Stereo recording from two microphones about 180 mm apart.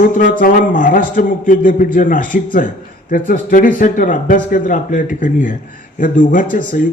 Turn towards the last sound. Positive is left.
turn(degrees=45)  # may be behind; listen again after turning